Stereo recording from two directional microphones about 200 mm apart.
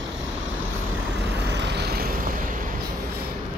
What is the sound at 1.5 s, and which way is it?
Vehicle, 60° right (ahead or behind).